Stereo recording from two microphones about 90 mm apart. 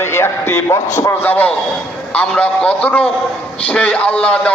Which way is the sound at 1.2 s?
20° left (ahead or behind).